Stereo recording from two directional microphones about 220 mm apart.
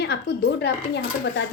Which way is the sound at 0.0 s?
50° left (ahead or behind).